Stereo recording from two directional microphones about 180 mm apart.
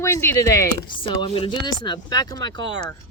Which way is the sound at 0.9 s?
30° left (ahead or behind).